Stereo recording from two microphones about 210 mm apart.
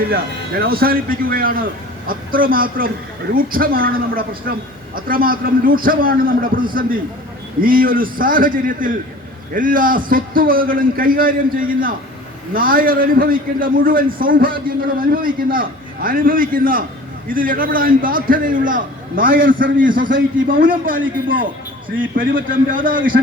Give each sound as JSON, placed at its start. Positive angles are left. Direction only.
{"t": 0.6, "sound": "a man's voice", "side_deg": -45}